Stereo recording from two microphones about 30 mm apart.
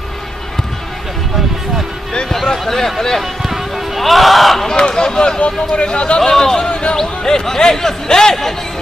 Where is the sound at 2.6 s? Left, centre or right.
Centre.